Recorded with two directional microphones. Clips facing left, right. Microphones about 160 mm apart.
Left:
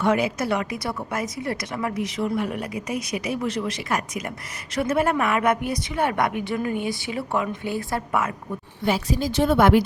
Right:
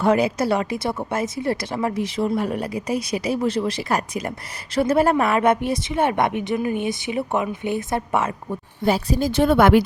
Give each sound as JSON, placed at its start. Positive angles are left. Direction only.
{"t": 0.0, "sound": "a woman's voice", "side_deg": -35}
{"t": 8.8, "sound": "a woman's voice", "side_deg": -35}
{"t": 9.3, "sound": "speech", "side_deg": -60}